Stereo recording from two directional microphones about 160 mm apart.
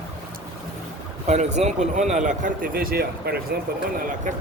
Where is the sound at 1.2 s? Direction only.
45° right (ahead or behind); by 3.4 s 70° right (ahead or behind).